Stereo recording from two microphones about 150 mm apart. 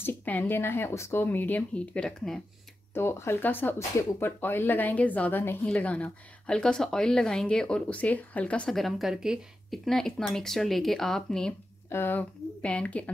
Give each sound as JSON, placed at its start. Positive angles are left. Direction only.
{"t": 0.0, "sound": "speech", "side_deg": 10}
{"t": 2.9, "sound": "a woman's voice", "side_deg": 15}